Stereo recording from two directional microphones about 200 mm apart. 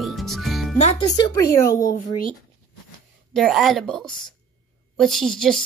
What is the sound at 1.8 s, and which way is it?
Speech, 45° left (ahead or behind).